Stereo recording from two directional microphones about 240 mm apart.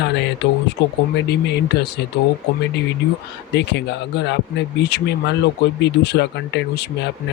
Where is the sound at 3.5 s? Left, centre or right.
Left.